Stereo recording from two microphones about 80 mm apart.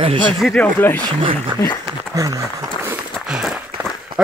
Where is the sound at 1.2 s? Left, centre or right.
Right.